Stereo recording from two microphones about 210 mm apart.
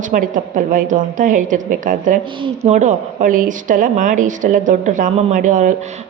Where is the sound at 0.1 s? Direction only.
40° right (ahead or behind).